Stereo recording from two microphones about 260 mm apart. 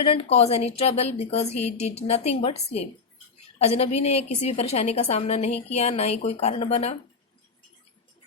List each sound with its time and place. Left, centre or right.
0.0 s a woman's voice: left